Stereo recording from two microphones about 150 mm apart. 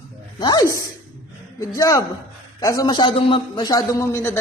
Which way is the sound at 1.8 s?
20° left (ahead or behind).